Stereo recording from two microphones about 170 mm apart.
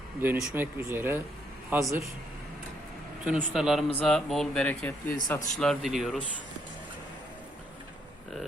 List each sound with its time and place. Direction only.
0.2 s speech: 10° right (ahead or behind)
3.2 s speech: 5° right (ahead or behind)